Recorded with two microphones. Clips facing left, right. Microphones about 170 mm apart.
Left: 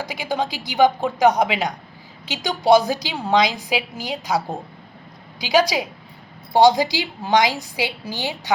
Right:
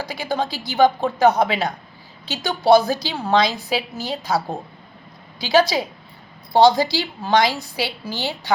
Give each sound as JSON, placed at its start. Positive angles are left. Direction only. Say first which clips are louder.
{"t": 0.0, "sound": "a woman's voice", "louder": "even", "side_deg": 15}